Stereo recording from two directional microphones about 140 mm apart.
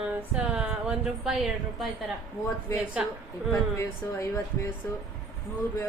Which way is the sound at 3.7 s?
20° left (ahead or behind).